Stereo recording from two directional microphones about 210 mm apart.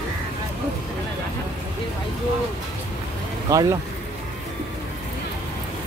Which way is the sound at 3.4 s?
15° right (ahead or behind).